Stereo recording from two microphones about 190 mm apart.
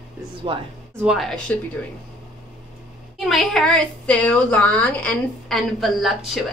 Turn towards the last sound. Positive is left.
turn(degrees=0)  # may be behind; listen again after turning